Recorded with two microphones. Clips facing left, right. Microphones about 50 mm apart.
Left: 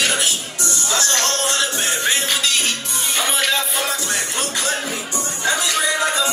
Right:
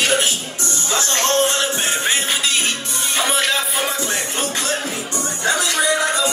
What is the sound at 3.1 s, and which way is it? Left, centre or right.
Music, centre.